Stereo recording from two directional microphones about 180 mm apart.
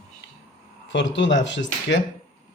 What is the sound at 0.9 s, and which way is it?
Speech, 85° left.